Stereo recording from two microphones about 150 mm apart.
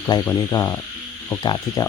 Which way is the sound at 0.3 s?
25° left (ahead or behind).